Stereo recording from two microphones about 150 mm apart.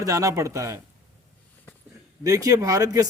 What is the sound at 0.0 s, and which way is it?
Speech, 20° right (ahead or behind).